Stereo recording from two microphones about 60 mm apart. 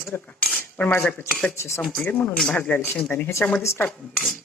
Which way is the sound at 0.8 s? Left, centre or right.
Left.